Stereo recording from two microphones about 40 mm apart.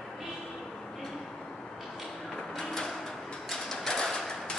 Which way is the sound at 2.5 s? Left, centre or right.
Centre.